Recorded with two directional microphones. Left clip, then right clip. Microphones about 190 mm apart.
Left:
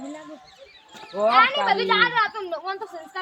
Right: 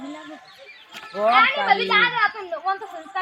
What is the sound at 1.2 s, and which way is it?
A woman's voice, 15° left (ahead or behind).